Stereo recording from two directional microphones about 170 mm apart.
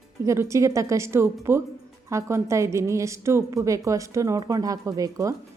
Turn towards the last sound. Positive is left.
turn(degrees=-20)  # may be behind; listen again after turning